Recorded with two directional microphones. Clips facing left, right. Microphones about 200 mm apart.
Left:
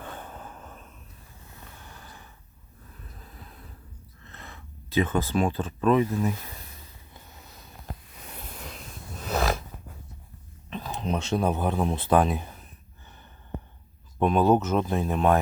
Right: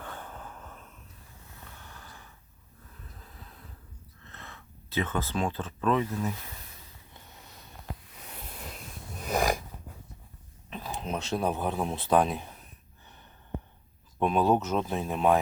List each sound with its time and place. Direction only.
0.0 s a sound: 20° left (ahead or behind)
4.3 s speech: 15° left (ahead or behind)
8.6 s wheeze: 10° right (ahead or behind)
10.7 s speech: 5° right (ahead or behind)
14.2 s speech: centre (ahead or behind)